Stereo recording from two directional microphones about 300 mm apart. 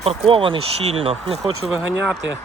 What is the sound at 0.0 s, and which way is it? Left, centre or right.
Speech, centre.